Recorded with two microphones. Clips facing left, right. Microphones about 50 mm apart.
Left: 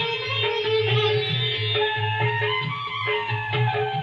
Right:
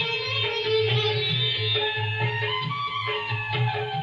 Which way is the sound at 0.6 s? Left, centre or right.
Left.